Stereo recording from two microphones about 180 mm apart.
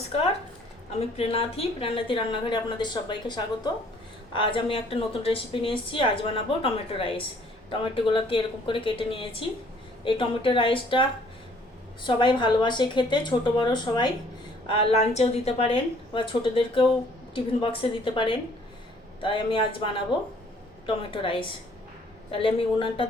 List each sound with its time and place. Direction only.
0.9 s a woman's voice: 35° left (ahead or behind)
12.0 s a woman's voice: 25° left (ahead or behind)